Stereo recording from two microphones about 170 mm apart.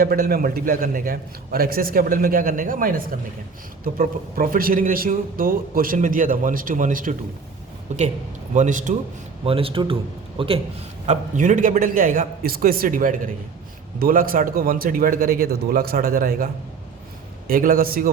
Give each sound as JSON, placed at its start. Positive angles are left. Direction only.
{"t": 0.0, "sound": "a man's voice", "side_deg": -60}
{"t": 9.4, "sound": "a man's voice", "side_deg": -35}
{"t": 11.0, "sound": "a man's voice", "side_deg": -45}
{"t": 17.5, "sound": "a man's voice", "side_deg": -55}